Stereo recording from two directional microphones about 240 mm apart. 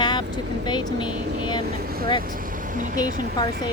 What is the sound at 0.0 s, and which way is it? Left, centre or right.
Vehicle, centre.